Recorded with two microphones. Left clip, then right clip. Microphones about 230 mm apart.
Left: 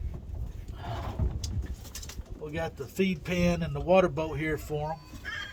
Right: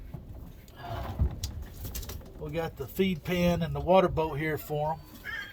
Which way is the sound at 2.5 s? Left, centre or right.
Right.